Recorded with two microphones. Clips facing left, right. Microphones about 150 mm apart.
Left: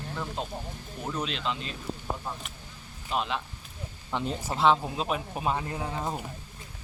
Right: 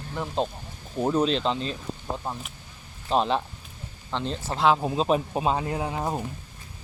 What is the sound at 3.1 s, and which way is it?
Speech, 35° right (ahead or behind).